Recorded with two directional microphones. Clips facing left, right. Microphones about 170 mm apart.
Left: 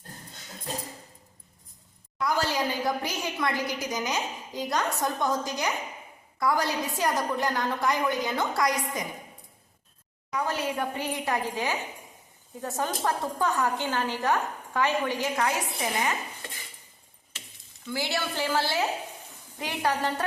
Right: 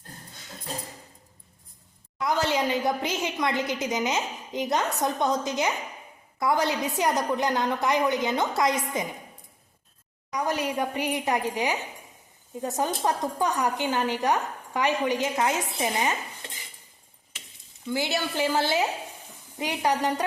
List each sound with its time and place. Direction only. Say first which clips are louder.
2.2 s a woman's voice: right 2 dB; 20° right (ahead or behind)
10.3 s a woman's voice: right 2 dB; 15° right (ahead or behind)
17.9 s a woman's voice: right 3 dB; 20° right (ahead or behind)